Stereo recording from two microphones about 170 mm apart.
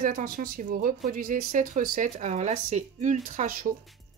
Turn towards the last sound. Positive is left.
turn(degrees=-50)  # may be behind; listen again after turning